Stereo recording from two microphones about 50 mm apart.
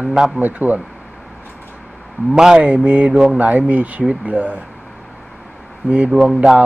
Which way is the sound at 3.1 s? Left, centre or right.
Centre.